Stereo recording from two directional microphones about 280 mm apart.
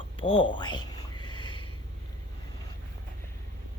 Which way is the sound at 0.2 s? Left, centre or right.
Centre.